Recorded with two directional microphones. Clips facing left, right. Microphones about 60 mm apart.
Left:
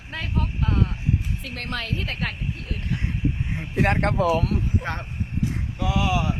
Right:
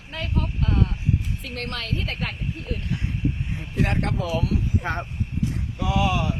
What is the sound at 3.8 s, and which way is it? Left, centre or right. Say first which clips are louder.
Speech: left 4 dB; left.